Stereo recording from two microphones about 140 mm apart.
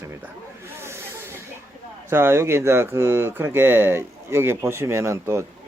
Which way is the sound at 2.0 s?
15° right (ahead or behind).